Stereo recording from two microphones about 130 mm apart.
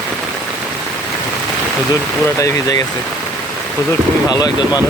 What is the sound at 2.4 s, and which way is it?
Speech, 30° left (ahead or behind).